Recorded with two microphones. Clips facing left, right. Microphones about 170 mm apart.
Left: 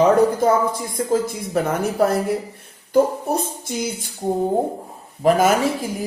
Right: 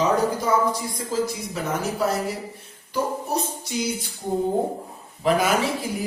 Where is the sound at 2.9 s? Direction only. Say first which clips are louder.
Left 8 dB; 50° left (ahead or behind).